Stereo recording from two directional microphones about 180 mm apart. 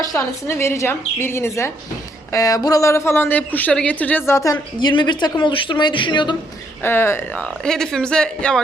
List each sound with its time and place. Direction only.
0.0 s a man's voice: 20° left (ahead or behind)
6.8 s speech: 15° left (ahead or behind)